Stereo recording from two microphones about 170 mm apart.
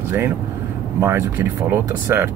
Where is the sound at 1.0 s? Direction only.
15° right (ahead or behind).